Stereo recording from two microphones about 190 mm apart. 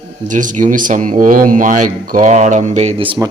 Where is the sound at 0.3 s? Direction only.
40° right (ahead or behind).